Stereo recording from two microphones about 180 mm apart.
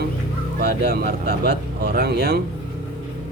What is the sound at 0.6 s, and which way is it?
Speech, 60° right (ahead or behind).